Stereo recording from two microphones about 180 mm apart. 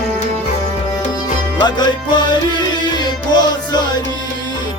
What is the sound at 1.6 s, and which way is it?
Music, 25° left (ahead or behind).